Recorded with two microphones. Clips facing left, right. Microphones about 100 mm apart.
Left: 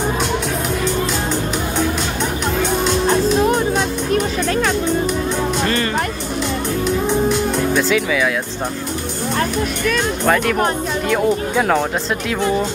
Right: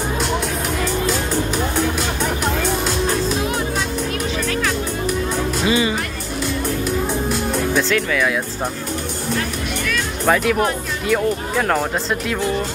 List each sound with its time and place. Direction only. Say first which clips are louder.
4.1 s music: left 5 dB; 35° left (ahead or behind)
7.1 s music: left 4 dB; centre (ahead or behind)
10.2 s speech: right 1 dB; centre (ahead or behind)